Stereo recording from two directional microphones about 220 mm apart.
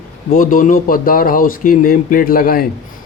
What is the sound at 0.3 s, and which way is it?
A man's voice, 40° left (ahead or behind).